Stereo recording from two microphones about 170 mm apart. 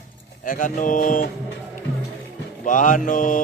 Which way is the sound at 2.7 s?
50° left (ahead or behind).